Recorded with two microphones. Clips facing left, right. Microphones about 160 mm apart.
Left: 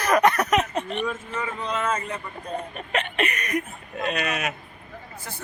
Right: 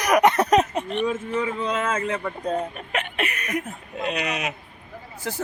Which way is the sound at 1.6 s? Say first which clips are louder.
Right 2 dB; 90° right.